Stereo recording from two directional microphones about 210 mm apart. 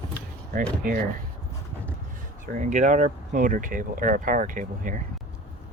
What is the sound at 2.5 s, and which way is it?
Speech, 35° right (ahead or behind).